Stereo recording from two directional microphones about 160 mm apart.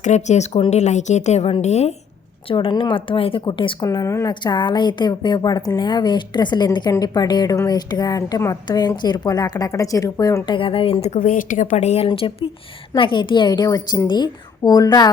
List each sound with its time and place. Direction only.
0.0 s speech: 45° left (ahead or behind)
2.5 s speech: 30° left (ahead or behind)
3.8 s a woman's voice: 20° left (ahead or behind)